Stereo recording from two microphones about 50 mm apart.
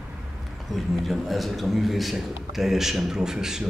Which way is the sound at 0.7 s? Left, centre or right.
Centre.